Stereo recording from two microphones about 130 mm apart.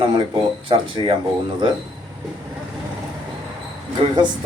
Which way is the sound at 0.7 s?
40° right (ahead or behind).